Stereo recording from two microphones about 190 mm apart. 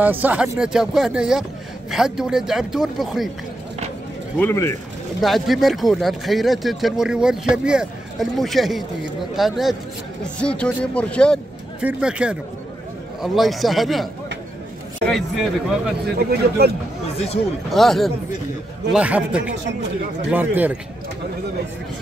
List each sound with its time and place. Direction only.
0.0 s speech: 10° right (ahead or behind)
4.4 s speech: 15° left (ahead or behind)
5.2 s speech: centre (ahead or behind)
11.8 s speech: 5° right (ahead or behind)
15.0 s speech: centre (ahead or behind)
16.2 s speech: 55° right (ahead or behind)
17.6 s a man's voice: centre (ahead or behind)